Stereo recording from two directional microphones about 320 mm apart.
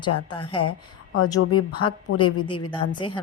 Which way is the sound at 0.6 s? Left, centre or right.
Left.